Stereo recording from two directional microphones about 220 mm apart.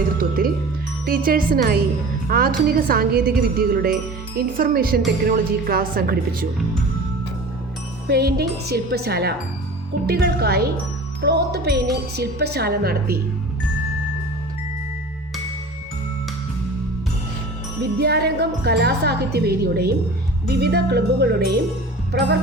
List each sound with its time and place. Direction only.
0.2 s a woman's voice: 40° right (ahead or behind)
8.0 s speech: 45° right (ahead or behind)
18.0 s speech: 45° right (ahead or behind)